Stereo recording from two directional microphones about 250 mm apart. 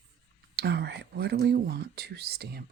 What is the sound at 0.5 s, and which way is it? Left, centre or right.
Speech, right.